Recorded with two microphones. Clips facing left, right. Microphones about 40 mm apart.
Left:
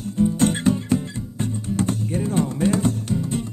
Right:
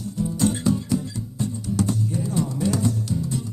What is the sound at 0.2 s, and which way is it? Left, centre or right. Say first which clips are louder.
Music: left 4 dB; left.